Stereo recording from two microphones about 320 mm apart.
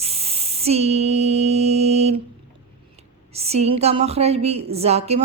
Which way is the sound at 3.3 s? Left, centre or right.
Centre.